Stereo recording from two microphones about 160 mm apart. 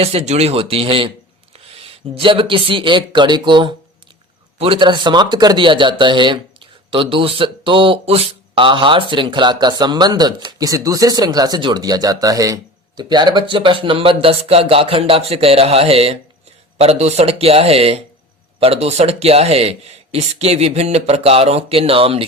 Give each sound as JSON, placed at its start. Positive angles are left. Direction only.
{"t": 0.0, "sound": "speech", "side_deg": -40}